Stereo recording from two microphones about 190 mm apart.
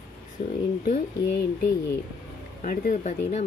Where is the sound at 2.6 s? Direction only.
45° left (ahead or behind).